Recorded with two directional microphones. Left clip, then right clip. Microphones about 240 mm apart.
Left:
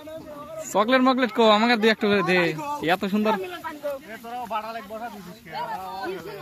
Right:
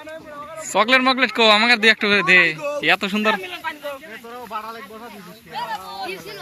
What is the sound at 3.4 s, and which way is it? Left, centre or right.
Speech, left.